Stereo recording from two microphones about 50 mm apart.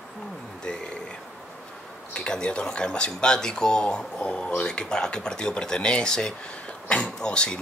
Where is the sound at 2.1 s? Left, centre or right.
Left.